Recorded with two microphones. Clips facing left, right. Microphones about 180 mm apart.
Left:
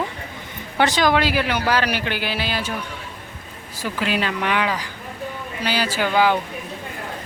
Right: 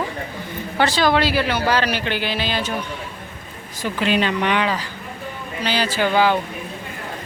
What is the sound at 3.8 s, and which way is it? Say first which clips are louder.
Speech: right 3 dB; 5° left (ahead or behind).